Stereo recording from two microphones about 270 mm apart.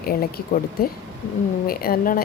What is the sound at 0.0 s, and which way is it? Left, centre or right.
Speech, left.